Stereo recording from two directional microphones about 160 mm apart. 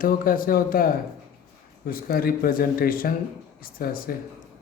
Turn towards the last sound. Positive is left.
turn(degrees=65)  # may be behind; listen again after turning